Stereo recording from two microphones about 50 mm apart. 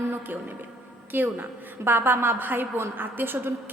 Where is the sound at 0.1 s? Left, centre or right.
Right.